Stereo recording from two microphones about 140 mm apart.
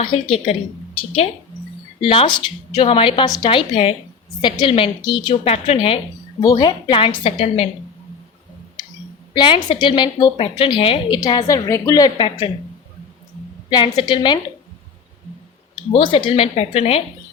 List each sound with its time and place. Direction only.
0.0 s a woman's voice: 40° left (ahead or behind)
6.4 s a woman's voice: 30° left (ahead or behind)
9.3 s a woman's voice: 35° left (ahead or behind)
11.2 s a woman's voice: 30° left (ahead or behind)
13.7 s a woman's voice: 35° left (ahead or behind)
15.9 s a woman's voice: 40° left (ahead or behind)